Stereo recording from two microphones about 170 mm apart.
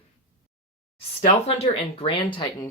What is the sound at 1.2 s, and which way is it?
Speech, 35° left (ahead or behind).